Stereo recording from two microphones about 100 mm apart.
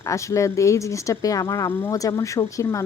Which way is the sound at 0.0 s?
30° left (ahead or behind).